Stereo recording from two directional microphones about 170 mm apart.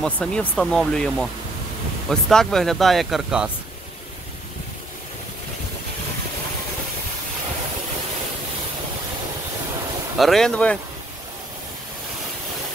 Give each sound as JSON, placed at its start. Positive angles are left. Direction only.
{"t": 0.0, "sound": "speech", "side_deg": 5}
{"t": 10.1, "sound": "speech", "side_deg": 0}